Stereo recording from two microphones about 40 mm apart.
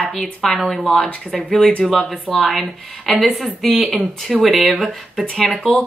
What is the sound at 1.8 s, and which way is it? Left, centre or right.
Speech, centre.